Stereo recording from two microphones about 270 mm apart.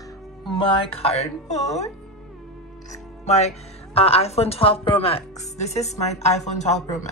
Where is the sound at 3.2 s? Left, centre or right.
Left.